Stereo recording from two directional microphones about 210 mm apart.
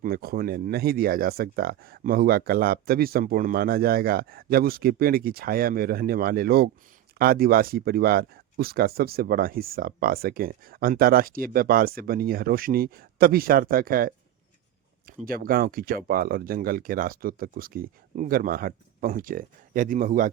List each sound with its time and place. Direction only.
0.0 s speech: 45° right (ahead or behind)
15.2 s speech: 45° right (ahead or behind)